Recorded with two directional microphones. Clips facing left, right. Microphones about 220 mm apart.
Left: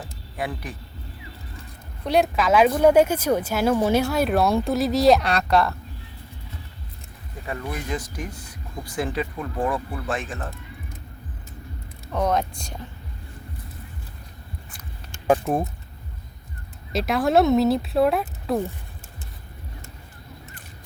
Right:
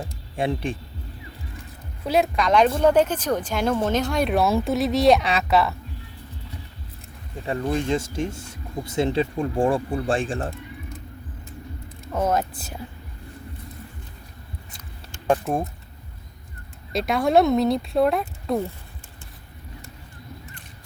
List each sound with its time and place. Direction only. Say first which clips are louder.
0.0 s music: right 5 dB; 25° right (ahead or behind)
2.0 s a woman's voice: left 1 dB; centre (ahead or behind)
7.4 s speech: right 7 dB; 30° right (ahead or behind)
12.1 s a woman's voice: even; 5° right (ahead or behind)
15.3 s a woman's voice: left 2 dB; centre (ahead or behind)
16.9 s a woman's voice: right 1 dB; centre (ahead or behind)